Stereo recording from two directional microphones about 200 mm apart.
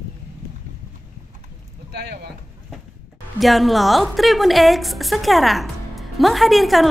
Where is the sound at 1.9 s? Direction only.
55° right (ahead or behind).